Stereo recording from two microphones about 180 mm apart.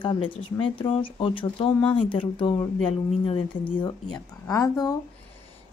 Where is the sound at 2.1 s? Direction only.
30° left (ahead or behind).